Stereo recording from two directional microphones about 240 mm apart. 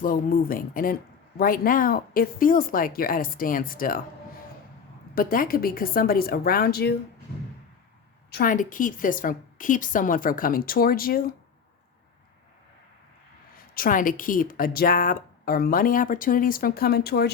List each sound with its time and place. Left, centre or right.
0.0 s speech: left
5.1 s speech: left
8.3 s speech: left
13.7 s speech: left